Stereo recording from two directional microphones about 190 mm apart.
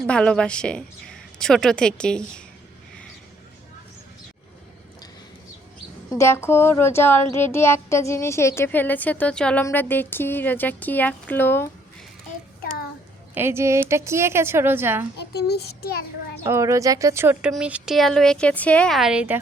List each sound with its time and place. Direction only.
0.1 s a woman's voice: 5° left (ahead or behind)
6.1 s speech: 15° left (ahead or behind)
13.3 s a woman's voice: 15° right (ahead or behind)
15.2 s a child's voice: 60° left (ahead or behind)
16.4 s a woman's voice: 15° right (ahead or behind)